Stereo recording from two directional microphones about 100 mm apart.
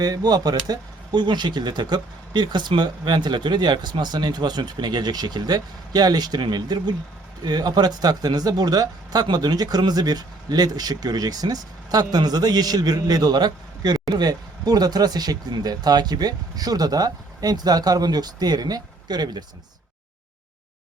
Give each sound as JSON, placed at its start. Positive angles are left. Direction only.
{"t": 0.0, "sound": "speech", "side_deg": -40}